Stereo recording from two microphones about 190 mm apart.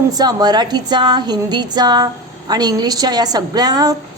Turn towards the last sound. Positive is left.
turn(degrees=-20)  # may be behind; listen again after turning